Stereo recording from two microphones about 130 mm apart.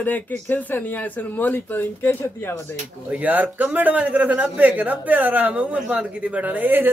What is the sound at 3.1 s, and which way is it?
A man's voice, 10° right (ahead or behind).